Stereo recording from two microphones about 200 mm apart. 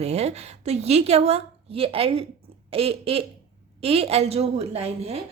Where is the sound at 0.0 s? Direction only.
30° right (ahead or behind).